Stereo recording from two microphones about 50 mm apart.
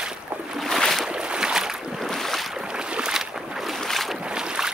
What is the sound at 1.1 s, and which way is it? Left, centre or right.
Boat, centre.